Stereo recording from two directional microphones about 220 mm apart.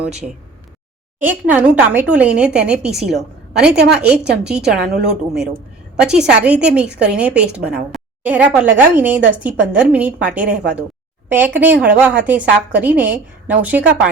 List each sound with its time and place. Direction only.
0.0 s a woman's voice: 5° right (ahead or behind)